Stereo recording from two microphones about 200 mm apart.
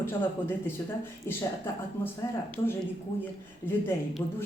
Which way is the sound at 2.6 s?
25° left (ahead or behind).